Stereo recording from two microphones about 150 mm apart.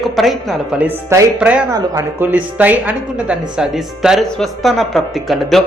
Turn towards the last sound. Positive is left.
turn(degrees=0)  # may be behind; listen again after turning